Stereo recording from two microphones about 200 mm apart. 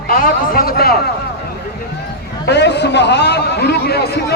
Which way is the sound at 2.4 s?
60° left (ahead or behind).